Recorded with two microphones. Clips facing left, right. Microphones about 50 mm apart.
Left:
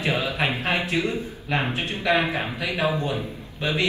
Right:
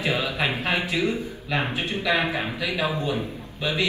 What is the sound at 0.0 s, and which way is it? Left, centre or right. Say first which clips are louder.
A man's voice: left 1 dB; left.